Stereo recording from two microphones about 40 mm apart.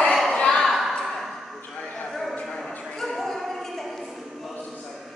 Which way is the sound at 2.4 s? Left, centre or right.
Centre.